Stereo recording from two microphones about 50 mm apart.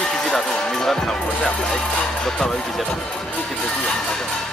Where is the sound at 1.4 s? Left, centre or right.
Centre.